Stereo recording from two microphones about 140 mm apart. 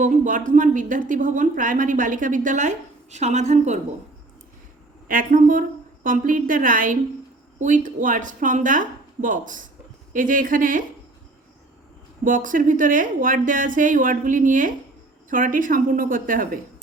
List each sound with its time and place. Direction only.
0.0 s speech: 65° right (ahead or behind)
5.0 s speech: 80° right
12.2 s speech: 70° right (ahead or behind)